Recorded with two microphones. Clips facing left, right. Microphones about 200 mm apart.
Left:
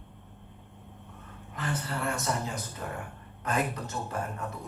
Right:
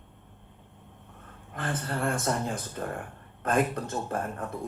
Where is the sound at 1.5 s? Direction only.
50° right (ahead or behind).